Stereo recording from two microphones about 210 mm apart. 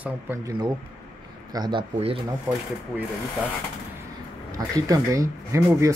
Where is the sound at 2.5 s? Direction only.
15° right (ahead or behind).